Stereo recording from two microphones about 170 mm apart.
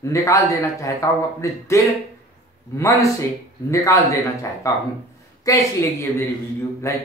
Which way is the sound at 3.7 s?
20° left (ahead or behind).